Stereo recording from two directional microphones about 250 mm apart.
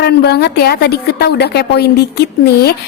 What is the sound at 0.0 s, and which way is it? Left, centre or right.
A woman's voice, left.